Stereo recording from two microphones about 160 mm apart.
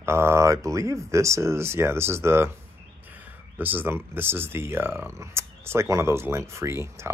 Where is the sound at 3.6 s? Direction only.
10° right (ahead or behind).